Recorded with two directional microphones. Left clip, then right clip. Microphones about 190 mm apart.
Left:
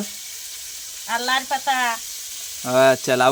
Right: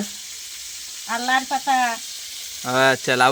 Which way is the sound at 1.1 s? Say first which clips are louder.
Even; 55° left (ahead or behind).